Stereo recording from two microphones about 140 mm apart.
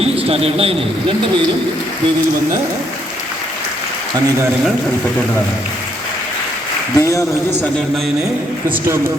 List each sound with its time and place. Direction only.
0.0 s a man's voice: 45° right (ahead or behind)
6.9 s speech: 20° left (ahead or behind)